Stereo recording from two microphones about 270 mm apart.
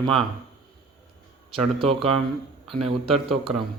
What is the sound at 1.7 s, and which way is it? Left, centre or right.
Speech, centre.